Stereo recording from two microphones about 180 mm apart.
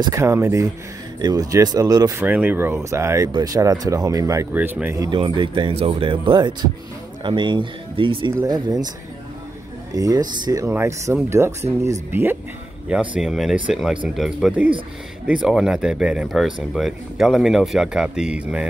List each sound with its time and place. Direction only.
0.0 s speech: 15° right (ahead or behind)
2.2 s speech: 10° right (ahead or behind)
9.9 s speech: 20° right (ahead or behind)